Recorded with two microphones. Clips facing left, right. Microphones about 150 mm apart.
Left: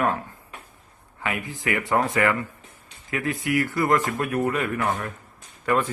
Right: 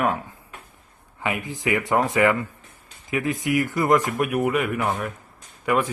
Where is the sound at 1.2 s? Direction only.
20° right (ahead or behind).